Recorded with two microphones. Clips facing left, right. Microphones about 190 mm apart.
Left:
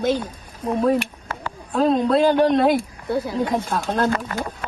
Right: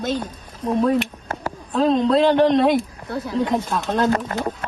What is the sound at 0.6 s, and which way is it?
A child's voice, 10° left (ahead or behind).